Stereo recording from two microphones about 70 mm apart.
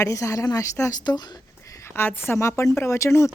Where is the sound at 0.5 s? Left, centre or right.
Left.